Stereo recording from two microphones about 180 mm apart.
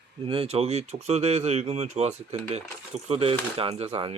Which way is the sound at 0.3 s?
30° right (ahead or behind).